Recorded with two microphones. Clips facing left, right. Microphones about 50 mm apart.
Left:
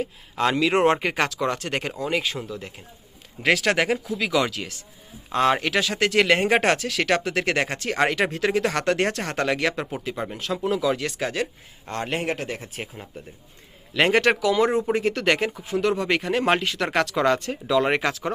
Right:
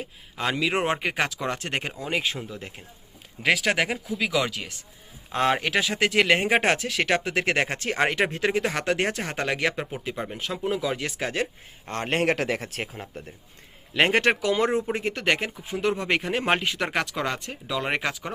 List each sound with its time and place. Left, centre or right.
0.0 s speech: centre
1.3 s speech: right
1.9 s speech: centre
2.5 s speech: right
3.4 s speech: centre; by 8.7 s right
8.7 s speech: centre
12.0 s a man's voice: right
12.3 s speech: right
13.9 s speech: right
14.9 s speech: centre
15.8 s speech: right
16.9 s speech: centre